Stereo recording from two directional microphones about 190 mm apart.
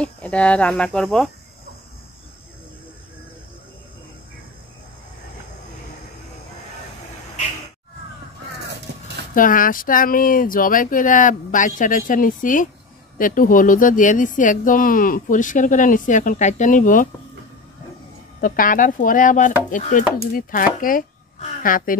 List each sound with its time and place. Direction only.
0.0 s speech: 5° left (ahead or behind)
9.3 s speech: 45° left (ahead or behind)
18.4 s speech: 45° left (ahead or behind)